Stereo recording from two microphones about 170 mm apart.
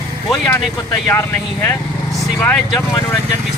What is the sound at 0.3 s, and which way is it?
Speech, 5° left (ahead or behind).